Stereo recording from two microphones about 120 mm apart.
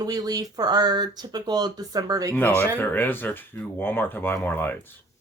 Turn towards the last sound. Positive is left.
turn(degrees=15)  # may be behind; listen again after turning